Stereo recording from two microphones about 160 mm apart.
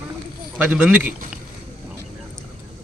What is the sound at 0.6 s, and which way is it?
Speech, 10° right (ahead or behind).